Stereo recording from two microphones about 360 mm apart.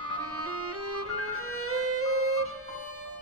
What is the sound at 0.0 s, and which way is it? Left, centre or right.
Music, right.